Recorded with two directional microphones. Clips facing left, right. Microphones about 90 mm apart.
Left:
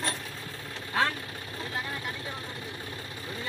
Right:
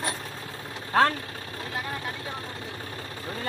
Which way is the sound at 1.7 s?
25° right (ahead or behind).